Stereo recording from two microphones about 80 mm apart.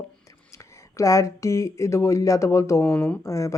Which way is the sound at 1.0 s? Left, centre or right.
Left.